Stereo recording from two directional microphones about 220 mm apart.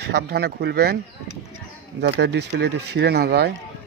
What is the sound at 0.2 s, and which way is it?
Speech, 50° right (ahead or behind).